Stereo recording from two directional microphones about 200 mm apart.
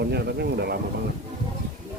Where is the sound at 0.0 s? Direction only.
55° right (ahead or behind).